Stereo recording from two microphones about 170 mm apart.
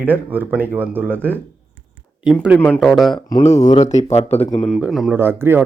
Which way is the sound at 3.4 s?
40° left (ahead or behind).